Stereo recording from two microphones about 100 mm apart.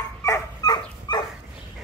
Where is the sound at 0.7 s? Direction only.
45° left (ahead or behind).